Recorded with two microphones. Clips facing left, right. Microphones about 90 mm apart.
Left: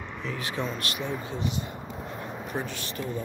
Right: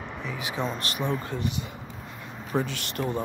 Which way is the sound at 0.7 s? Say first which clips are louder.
Right 2 dB; 40° right (ahead or behind).